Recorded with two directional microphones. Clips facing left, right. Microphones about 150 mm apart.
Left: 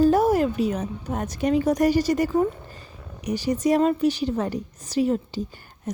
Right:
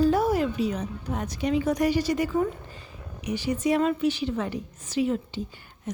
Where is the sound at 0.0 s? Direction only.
45° left (ahead or behind).